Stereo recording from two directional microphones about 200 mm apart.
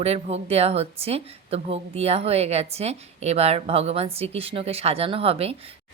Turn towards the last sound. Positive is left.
turn(degrees=-30)  # may be behind; listen again after turning